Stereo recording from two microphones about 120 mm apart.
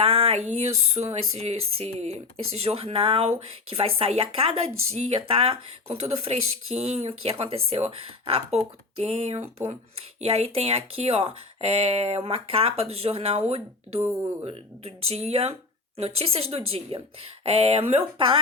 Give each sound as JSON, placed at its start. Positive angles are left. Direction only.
{"t": 0.0, "sound": "speech", "side_deg": -55}
{"t": 14.4, "sound": "speech", "side_deg": -55}